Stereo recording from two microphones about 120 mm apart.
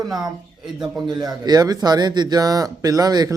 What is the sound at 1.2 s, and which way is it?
Speech, 30° right (ahead or behind).